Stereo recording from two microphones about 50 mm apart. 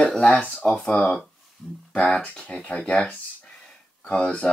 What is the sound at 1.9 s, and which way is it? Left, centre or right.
Speech, left.